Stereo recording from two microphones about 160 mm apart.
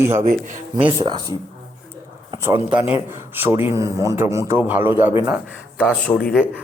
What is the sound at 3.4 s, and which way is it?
A man's voice, 15° right (ahead or behind).